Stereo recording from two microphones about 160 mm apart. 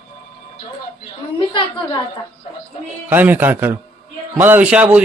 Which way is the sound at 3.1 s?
10° right (ahead or behind).